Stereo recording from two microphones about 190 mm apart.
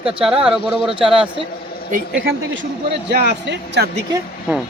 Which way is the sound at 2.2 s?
75° right (ahead or behind).